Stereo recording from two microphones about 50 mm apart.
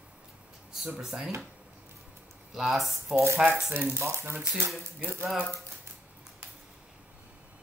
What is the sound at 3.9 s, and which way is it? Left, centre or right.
Speech, right.